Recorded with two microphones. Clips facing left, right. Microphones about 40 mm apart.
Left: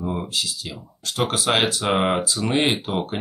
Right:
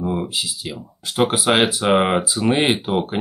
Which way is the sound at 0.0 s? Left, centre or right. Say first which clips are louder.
Right 3 dB; centre.